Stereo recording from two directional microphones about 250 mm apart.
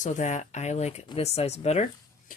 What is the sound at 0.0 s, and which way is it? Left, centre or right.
Speech, left.